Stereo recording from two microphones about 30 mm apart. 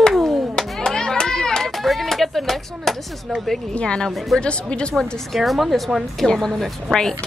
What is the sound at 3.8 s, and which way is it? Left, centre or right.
Speech, left.